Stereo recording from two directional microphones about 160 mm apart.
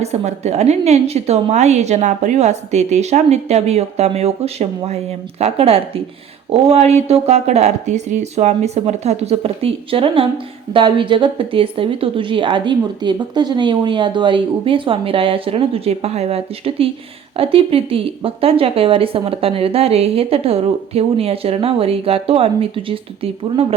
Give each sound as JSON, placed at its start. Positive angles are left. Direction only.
{"t": 0.0, "sound": "a woman's voice", "side_deg": -45}